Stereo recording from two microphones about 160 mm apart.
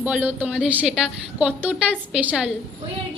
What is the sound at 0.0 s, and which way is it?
A woman's voice, 10° right (ahead or behind).